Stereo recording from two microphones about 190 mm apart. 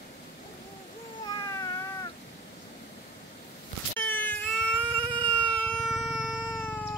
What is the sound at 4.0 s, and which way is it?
Wail, 10° left (ahead or behind).